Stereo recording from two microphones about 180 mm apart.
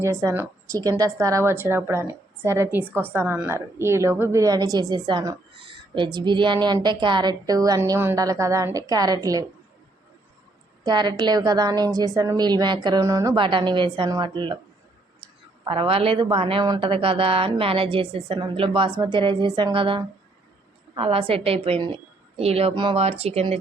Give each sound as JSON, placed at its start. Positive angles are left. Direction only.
{"t": 0.0, "sound": "a woman's voice", "side_deg": -15}
{"t": 10.8, "sound": "a woman's voice", "side_deg": -25}
{"t": 15.6, "sound": "a woman's voice", "side_deg": -30}